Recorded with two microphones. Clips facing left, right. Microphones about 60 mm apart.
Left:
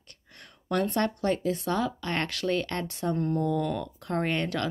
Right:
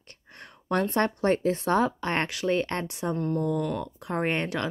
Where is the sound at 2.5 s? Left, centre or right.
Right.